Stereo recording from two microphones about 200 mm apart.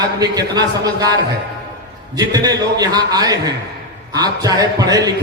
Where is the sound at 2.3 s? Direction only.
20° right (ahead or behind).